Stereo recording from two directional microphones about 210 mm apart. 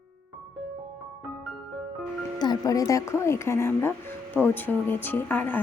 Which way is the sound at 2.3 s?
20° left (ahead or behind).